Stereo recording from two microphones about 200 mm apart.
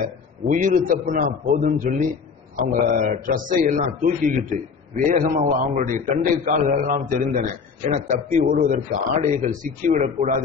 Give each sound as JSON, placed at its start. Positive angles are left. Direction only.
{"t": 0.5, "sound": "a man's voice", "side_deg": -40}